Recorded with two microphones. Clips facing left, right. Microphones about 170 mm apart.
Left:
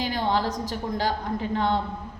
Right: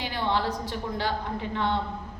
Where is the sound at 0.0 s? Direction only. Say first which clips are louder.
Left 3 dB; 40° left (ahead or behind).